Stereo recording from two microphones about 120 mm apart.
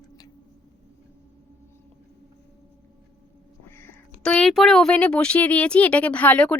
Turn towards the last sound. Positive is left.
turn(degrees=10)  # may be behind; listen again after turning